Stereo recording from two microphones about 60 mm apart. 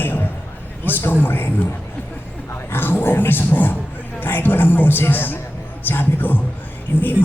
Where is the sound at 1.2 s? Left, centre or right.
Left.